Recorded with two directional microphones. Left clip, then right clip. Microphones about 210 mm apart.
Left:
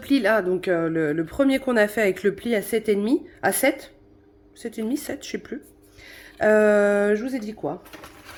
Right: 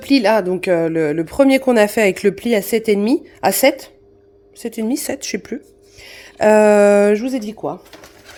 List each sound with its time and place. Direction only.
0.0 s a woman's voice: 30° right (ahead or behind)